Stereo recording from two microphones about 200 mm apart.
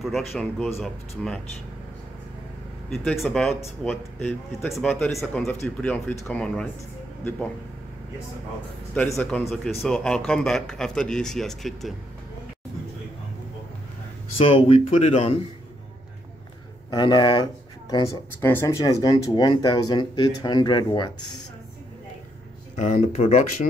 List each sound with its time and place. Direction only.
0.0 s speech: centre (ahead or behind)
2.9 s speech: centre (ahead or behind)
8.9 s speech: 5° left (ahead or behind)
14.4 s speech: 30° left (ahead or behind)
16.9 s speech: 20° left (ahead or behind)
22.8 s speech: 35° left (ahead or behind)